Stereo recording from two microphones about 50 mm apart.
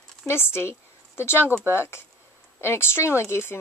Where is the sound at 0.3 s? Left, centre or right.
Left.